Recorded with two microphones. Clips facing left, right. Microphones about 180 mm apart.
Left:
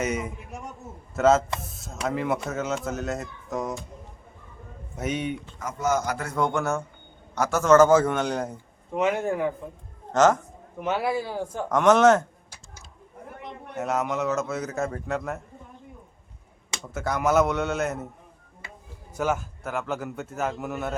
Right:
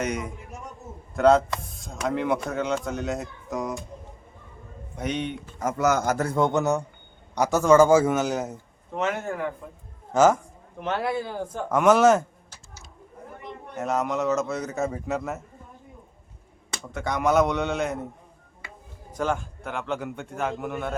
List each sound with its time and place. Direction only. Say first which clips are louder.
0.0 s a man's voice: left 1 dB; 5° left (ahead or behind)
4.9 s speech: even; 5° left (ahead or behind)
5.6 s a man's voice: right 3 dB; 70° right (ahead or behind)
6.1 s a man's voice: right 5 dB; 45° right (ahead or behind)
6.3 s a man's voice: right 1 dB; 20° right (ahead or behind); by 8.5 s 5° right (ahead or behind)
9.0 s speech: left 3 dB; 15° left (ahead or behind)
10.1 s a man's voice: right 1 dB; 10° right (ahead or behind)
10.8 s speech: left 1 dB; 5° left (ahead or behind)
11.7 s a man's voice: even; 5° right (ahead or behind)
13.7 s speech: right 1 dB; centre (ahead or behind)
16.9 s speech: even; 5° left (ahead or behind)
19.1 s speech: even; 5° left (ahead or behind)